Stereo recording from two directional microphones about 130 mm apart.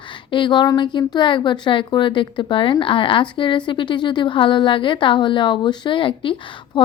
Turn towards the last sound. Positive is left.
turn(degrees=40)  # may be behind; listen again after turning